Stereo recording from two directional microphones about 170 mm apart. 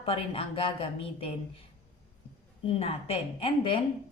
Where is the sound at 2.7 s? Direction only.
35° left (ahead or behind).